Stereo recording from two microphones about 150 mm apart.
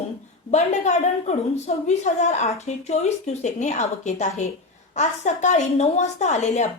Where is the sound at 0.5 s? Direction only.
50° left (ahead or behind).